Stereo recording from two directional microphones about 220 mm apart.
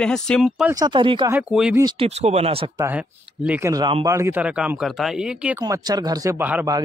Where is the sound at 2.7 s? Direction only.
10° right (ahead or behind).